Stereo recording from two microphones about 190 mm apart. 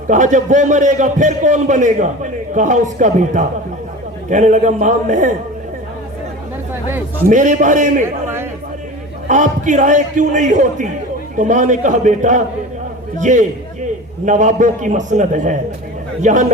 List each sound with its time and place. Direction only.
0.1 s a man's voice: 40° right (ahead or behind)
7.3 s a man's voice: 40° right (ahead or behind)
9.2 s a man's voice: 40° right (ahead or behind)